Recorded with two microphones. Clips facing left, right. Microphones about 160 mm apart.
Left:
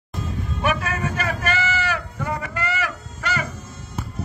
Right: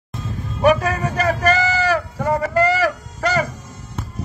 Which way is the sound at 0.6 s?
35° right (ahead or behind).